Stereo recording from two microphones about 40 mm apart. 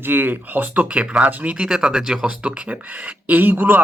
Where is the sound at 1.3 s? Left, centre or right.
Right.